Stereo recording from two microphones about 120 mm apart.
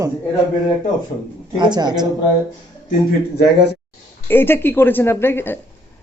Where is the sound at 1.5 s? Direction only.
40° right (ahead or behind).